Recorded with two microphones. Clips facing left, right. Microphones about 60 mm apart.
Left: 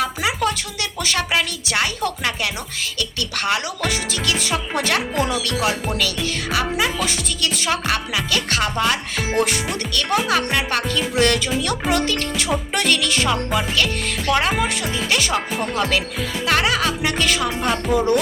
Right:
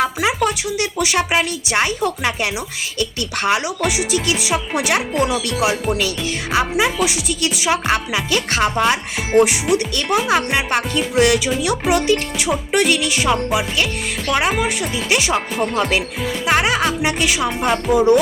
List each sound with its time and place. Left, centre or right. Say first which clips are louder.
0.0 s speech: right 3 dB; right
3.8 s speech: right 4 dB; centre
6.0 s speech: right 2 dB; right
7.0 s speech: right 4 dB; centre
7.9 s speech: right 3 dB; right
11.1 s speech: right 4 dB; centre
14.5 s speech: right 2 dB; centre
15.1 s speech: right 3 dB; centre